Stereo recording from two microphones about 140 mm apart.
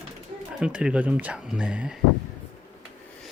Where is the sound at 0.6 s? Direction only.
5° right (ahead or behind).